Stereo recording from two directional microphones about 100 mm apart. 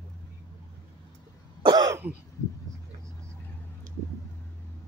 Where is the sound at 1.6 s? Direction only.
45° right (ahead or behind).